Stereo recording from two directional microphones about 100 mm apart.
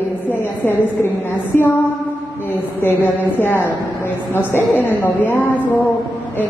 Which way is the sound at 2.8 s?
20° left (ahead or behind).